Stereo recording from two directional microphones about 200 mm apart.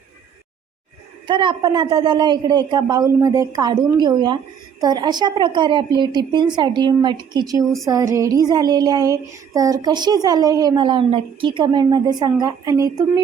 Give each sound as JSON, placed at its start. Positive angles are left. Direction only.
{"t": 1.3, "sound": "child singing", "side_deg": -25}